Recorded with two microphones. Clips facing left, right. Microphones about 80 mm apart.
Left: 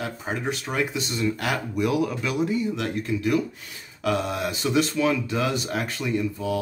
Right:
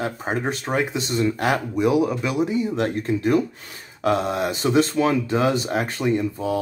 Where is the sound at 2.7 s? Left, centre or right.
Right.